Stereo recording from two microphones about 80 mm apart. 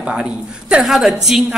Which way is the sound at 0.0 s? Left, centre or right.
Centre.